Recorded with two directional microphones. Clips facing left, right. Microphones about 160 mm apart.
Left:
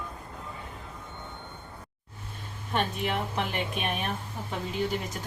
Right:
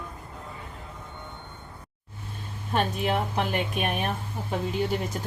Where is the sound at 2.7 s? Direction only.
40° right (ahead or behind).